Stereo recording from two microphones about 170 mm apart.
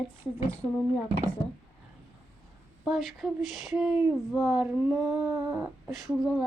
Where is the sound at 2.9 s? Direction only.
Centre (ahead or behind).